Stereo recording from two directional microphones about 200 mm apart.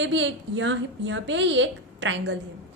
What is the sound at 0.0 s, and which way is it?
A woman's voice, 65° right (ahead or behind).